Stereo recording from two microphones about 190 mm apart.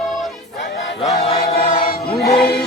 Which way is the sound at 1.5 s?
50° left (ahead or behind).